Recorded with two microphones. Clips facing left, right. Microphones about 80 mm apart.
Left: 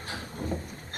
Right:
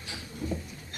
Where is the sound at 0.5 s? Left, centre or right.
Left.